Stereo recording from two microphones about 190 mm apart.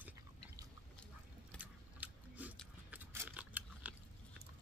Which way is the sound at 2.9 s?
10° right (ahead or behind).